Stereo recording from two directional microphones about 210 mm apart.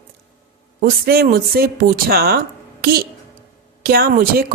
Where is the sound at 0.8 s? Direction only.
45° right (ahead or behind).